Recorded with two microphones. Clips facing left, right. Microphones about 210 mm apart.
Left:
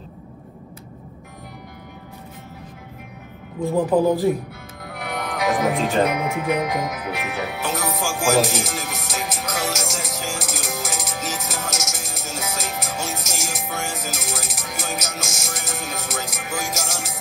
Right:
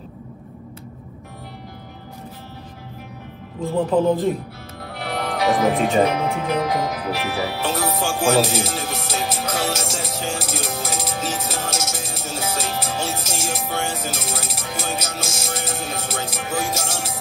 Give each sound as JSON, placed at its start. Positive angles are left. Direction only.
{"t": 4.8, "sound": "music", "side_deg": -30}
{"t": 6.0, "sound": "speech", "side_deg": -30}